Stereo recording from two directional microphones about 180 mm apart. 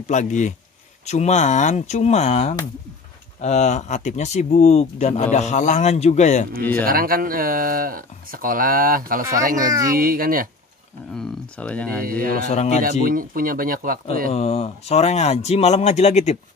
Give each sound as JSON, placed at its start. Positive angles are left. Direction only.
{"t": 0.0, "sound": "speech", "side_deg": 40}
{"t": 6.8, "sound": "speech", "side_deg": -55}
{"t": 9.7, "sound": "speech", "side_deg": -20}
{"t": 9.9, "sound": "speech", "side_deg": -55}
{"t": 11.1, "sound": "speech", "side_deg": 5}
{"t": 12.4, "sound": "speech", "side_deg": 40}
{"t": 13.0, "sound": "speech", "side_deg": -50}
{"t": 14.3, "sound": "speech", "side_deg": 35}